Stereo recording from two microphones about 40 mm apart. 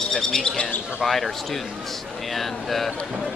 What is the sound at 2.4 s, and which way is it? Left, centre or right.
Speech, centre.